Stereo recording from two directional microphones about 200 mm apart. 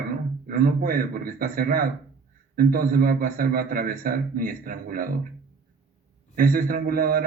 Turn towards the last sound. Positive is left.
turn(degrees=-45)  # may be behind; listen again after turning